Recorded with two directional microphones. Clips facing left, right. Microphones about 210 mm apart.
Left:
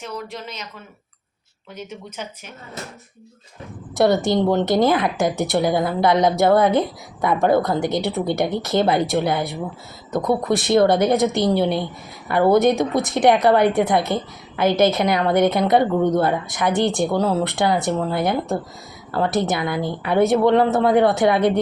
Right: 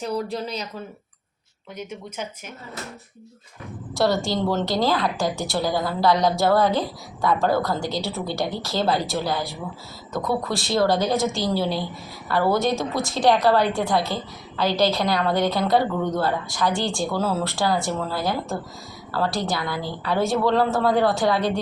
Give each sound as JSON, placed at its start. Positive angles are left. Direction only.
{"t": 0.0, "sound": "speech", "side_deg": -35}
{"t": 1.7, "sound": "speech", "side_deg": -10}
{"t": 3.9, "sound": "a woman's voice", "side_deg": 20}